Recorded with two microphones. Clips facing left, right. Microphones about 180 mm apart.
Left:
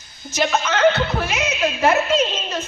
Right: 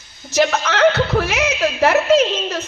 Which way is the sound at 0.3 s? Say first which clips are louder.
Right 3 dB; 85° right.